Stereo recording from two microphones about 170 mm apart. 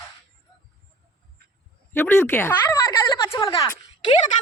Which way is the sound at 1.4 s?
70° right (ahead or behind).